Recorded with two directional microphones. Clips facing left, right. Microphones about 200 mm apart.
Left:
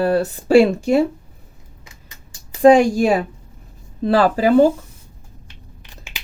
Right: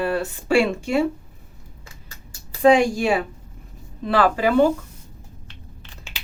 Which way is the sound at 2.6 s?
40° left (ahead or behind).